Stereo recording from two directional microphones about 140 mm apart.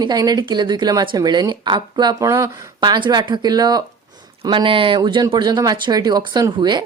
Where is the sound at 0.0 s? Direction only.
30° right (ahead or behind).